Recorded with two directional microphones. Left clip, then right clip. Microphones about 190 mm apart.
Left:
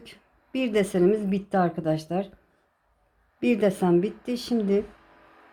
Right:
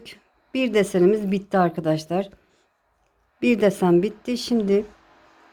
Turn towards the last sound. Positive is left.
turn(degrees=-20)  # may be behind; listen again after turning